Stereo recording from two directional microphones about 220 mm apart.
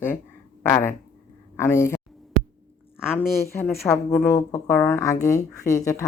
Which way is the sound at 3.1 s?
10° left (ahead or behind).